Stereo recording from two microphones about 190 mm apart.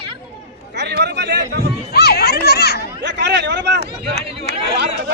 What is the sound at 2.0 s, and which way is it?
Children playing, 55° left (ahead or behind).